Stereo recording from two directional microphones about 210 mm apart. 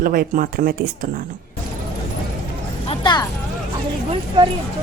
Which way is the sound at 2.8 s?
25° left (ahead or behind).